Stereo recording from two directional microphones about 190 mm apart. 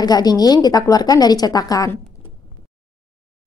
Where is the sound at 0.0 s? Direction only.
20° left (ahead or behind).